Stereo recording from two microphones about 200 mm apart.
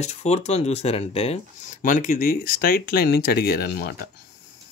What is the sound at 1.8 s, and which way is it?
Speech, 40° left (ahead or behind).